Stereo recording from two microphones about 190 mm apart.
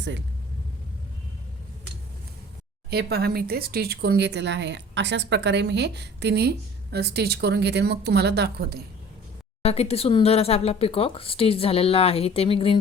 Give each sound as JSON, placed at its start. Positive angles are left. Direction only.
{"t": 2.9, "sound": "speech", "side_deg": -55}
{"t": 9.6, "sound": "speech", "side_deg": 35}